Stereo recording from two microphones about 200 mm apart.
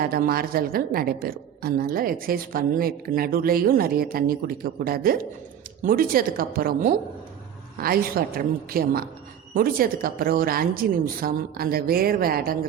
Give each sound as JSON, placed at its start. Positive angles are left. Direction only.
{"t": 0.0, "sound": "a woman's voice", "side_deg": -50}